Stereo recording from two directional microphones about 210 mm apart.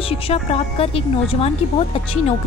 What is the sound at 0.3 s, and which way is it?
Speech, 25° left (ahead or behind).